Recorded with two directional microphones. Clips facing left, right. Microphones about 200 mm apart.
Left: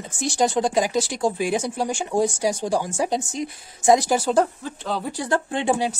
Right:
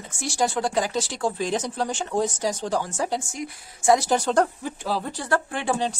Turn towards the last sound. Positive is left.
turn(degrees=10)  # may be behind; listen again after turning